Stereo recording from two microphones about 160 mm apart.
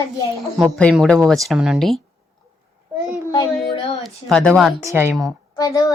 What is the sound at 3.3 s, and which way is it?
Speech, 25° left (ahead or behind).